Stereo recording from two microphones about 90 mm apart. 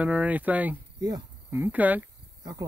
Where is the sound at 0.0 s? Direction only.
15° right (ahead or behind).